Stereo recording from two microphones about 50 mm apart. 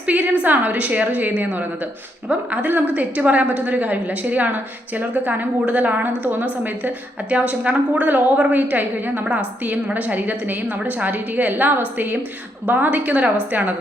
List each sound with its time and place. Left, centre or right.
0.0 s a woman's voice: right
2.5 s a woman's voice: right